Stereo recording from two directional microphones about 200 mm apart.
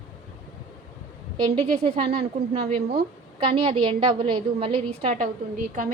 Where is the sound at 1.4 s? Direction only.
25° right (ahead or behind).